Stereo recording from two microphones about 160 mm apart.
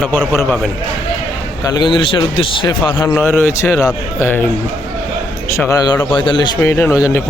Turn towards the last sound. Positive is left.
turn(degrees=20)  # may be behind; listen again after turning